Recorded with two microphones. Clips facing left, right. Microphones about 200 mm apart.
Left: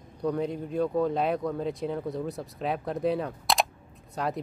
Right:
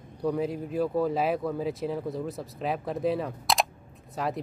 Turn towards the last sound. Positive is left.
turn(degrees=0)  # may be behind; listen again after turning